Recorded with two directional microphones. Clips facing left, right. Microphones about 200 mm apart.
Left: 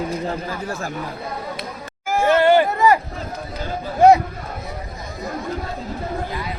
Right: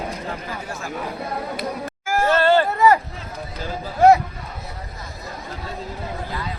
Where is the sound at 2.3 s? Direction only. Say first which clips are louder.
Left 3 dB; 15° left (ahead or behind).